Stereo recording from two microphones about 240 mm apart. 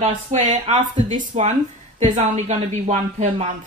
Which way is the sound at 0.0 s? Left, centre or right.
Right.